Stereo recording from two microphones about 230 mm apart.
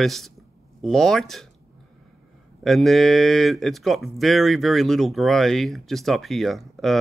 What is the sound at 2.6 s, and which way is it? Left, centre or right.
Speech, centre.